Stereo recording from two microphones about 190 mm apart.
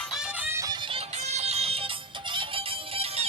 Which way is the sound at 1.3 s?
35° right (ahead or behind).